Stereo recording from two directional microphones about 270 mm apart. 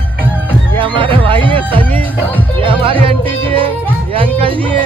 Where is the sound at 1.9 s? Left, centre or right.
Centre.